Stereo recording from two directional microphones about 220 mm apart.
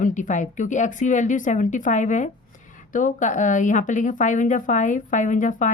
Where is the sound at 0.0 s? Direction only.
35° left (ahead or behind).